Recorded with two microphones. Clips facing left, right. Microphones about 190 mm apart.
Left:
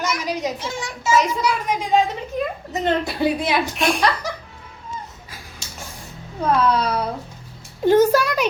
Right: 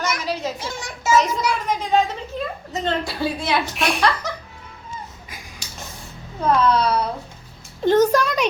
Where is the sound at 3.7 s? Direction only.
Centre (ahead or behind).